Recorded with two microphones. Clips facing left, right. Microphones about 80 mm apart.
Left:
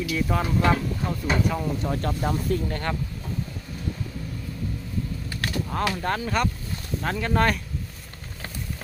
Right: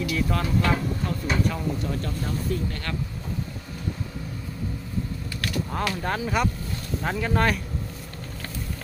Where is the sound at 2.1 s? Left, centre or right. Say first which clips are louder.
Left 3 dB; left.